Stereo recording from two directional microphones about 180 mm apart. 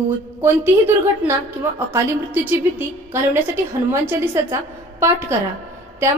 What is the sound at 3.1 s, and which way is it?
A woman's voice, 15° right (ahead or behind).